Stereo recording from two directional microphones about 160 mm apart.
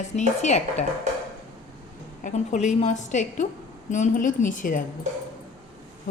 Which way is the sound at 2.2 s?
50° left (ahead or behind).